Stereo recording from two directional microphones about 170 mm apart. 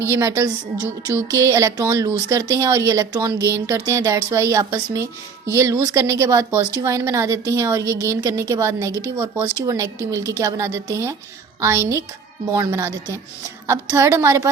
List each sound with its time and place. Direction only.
0.0 s a woman's voice: 15° right (ahead or behind)